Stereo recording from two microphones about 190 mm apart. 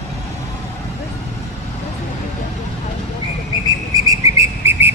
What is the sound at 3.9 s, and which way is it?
Whistle, 15° right (ahead or behind).